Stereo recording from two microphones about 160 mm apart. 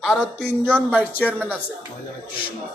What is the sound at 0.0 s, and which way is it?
Speech, centre (ahead or behind).